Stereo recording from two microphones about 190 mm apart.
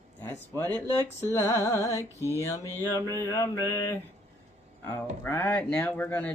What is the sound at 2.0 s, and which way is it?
Mantra, 15° right (ahead or behind).